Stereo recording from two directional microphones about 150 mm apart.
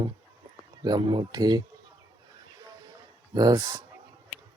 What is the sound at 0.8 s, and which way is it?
Speech, 30° right (ahead or behind).